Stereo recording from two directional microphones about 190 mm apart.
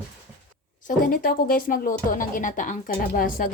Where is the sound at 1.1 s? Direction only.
50° left (ahead or behind).